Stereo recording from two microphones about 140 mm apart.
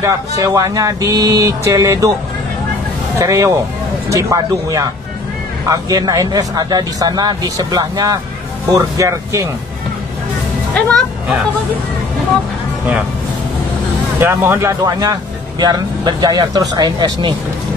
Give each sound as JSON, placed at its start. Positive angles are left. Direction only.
{"t": 0.0, "sound": "speech", "side_deg": -25}
{"t": 3.2, "sound": "speech", "side_deg": -20}
{"t": 10.7, "sound": "speech", "side_deg": 0}
{"t": 14.2, "sound": "speech", "side_deg": -20}